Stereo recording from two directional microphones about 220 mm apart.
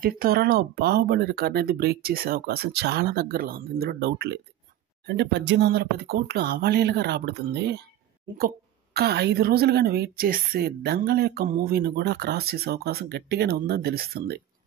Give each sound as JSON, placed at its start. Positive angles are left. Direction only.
{"t": 0.0, "sound": "a woman's voice", "side_deg": -45}